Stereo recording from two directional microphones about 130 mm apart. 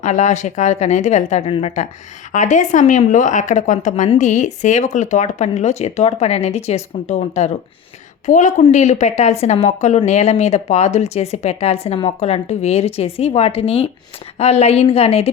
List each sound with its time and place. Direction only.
0.0 s a woman's voice: 65° left (ahead or behind)
2.3 s a woman's voice: 70° left (ahead or behind)
8.3 s a woman's voice: 75° left (ahead or behind); by 15.3 s 50° left (ahead or behind)